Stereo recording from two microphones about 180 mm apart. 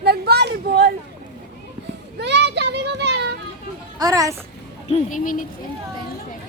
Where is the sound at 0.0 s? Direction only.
65° right (ahead or behind).